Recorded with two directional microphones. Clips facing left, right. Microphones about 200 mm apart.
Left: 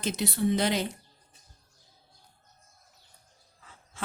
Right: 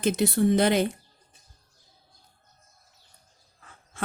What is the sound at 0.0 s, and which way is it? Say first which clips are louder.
Speech: right 6 dB; 55° right (ahead or behind).